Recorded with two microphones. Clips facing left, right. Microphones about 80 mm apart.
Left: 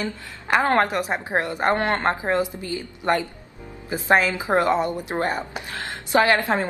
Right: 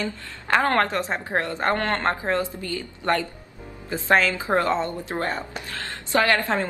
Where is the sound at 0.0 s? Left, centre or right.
Centre.